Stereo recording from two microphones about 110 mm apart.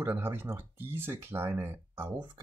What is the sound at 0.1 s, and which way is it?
Speech, 20° right (ahead or behind).